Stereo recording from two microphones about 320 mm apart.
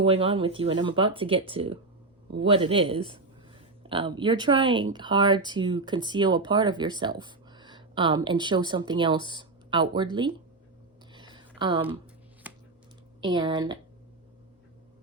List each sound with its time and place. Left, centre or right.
0.0 s speech: centre
11.1 s a sound: centre
13.2 s speech: centre